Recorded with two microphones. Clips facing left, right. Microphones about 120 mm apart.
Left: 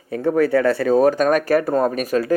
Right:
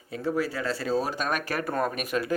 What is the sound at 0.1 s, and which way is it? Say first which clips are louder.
Speech: left 11 dB; 55° left (ahead or behind).